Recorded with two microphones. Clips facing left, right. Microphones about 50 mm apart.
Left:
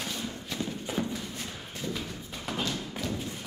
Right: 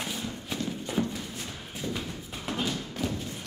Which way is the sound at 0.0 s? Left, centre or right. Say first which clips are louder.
Right 1 dB; centre.